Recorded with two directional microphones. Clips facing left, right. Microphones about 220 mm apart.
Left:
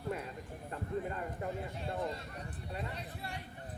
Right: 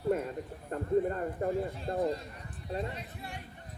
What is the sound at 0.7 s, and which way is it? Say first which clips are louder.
A woman's voice: right 9 dB; 45° right (ahead or behind).